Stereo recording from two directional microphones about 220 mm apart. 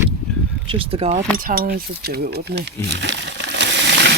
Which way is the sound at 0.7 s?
25° right (ahead or behind).